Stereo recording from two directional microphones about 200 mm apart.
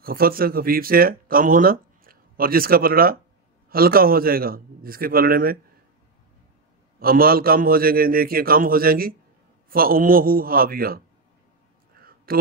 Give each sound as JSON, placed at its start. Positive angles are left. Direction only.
{"t": 0.0, "sound": "a man's voice", "side_deg": -45}
{"t": 7.0, "sound": "a man's voice", "side_deg": -45}
{"t": 12.0, "sound": "a sound", "side_deg": -45}